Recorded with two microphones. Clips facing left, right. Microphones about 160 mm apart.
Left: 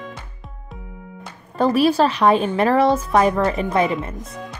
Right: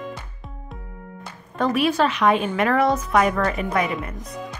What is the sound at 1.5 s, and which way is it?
A woman's voice, 35° left (ahead or behind).